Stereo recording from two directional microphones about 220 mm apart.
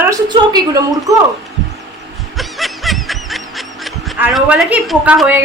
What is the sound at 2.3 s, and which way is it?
Snicker, centre (ahead or behind).